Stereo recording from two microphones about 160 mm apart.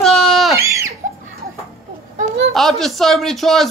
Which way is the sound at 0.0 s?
Centre (ahead or behind).